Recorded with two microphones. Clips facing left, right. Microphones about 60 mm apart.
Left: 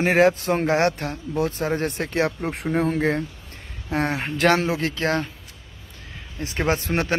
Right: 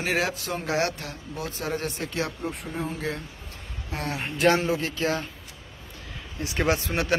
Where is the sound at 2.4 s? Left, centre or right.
Left.